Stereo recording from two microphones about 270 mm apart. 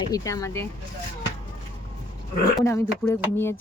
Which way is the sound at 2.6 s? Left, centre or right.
Centre.